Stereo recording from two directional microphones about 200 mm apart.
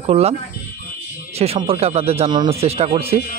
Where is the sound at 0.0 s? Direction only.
30° right (ahead or behind).